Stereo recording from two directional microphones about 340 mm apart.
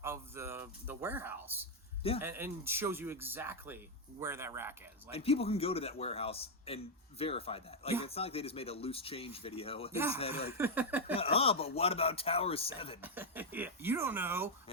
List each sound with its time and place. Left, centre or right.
0.0 s speech: centre
5.1 s a man's voice: centre
9.9 s speech: centre
10.2 s a man's voice: centre
10.5 s speech: centre
11.2 s a man's voice: centre
13.0 s speech: centre